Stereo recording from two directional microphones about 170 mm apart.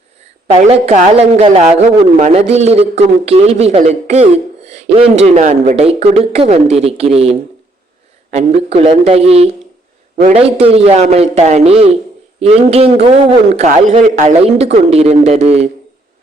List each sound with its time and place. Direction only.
0.7 s a man's voice: 40° right (ahead or behind)